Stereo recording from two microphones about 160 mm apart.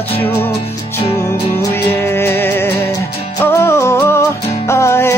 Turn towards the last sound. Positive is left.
turn(degrees=15)  # may be behind; listen again after turning